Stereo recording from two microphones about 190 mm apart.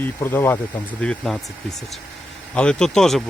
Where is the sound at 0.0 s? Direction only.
10° left (ahead or behind).